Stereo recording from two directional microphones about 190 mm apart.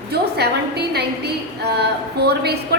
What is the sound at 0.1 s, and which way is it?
A woman's voice, 60° right (ahead or behind).